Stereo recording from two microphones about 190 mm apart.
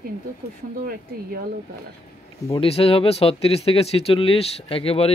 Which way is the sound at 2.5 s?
30° left (ahead or behind).